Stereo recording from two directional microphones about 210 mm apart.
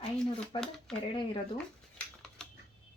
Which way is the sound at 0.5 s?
25° left (ahead or behind).